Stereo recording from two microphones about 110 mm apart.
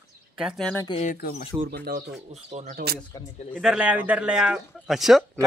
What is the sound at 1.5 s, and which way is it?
Speech, 25° right (ahead or behind).